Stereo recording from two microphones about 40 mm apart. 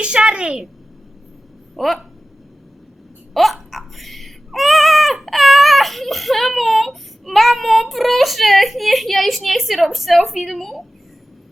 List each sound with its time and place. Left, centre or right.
0.0 s a child's voice: right
1.7 s speech: centre
3.3 s a child's voice: centre